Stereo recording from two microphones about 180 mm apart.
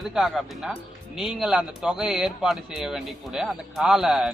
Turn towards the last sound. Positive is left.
turn(degrees=0)  # may be behind; listen again after turning